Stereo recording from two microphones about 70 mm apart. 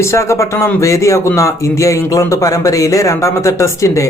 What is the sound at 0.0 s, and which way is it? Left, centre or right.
Speech, left.